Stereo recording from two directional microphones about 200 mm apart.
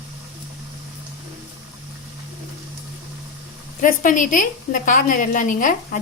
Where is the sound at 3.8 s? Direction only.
40° left (ahead or behind).